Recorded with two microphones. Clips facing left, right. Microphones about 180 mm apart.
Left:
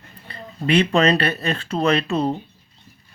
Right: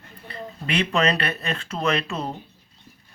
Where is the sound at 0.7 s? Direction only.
35° left (ahead or behind).